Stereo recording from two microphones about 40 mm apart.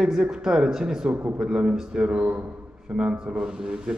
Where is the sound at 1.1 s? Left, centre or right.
Right.